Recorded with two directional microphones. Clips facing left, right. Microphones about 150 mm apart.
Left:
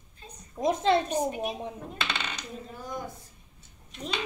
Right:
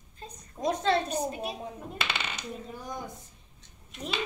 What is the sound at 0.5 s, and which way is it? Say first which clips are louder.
Speech: left 3 dB; 20° left (ahead or behind).